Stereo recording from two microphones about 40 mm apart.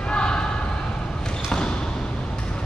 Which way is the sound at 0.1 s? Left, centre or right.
Left.